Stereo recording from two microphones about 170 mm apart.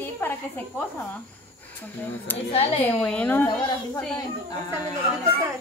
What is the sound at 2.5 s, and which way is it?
Speech, 35° left (ahead or behind).